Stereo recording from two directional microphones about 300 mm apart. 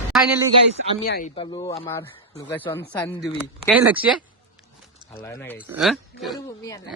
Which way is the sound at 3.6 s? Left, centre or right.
Centre.